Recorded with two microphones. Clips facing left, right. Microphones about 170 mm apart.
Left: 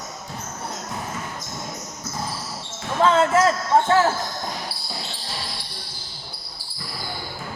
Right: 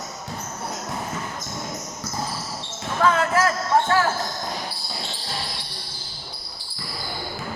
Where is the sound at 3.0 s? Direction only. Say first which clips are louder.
Left 3 dB; 25° left (ahead or behind).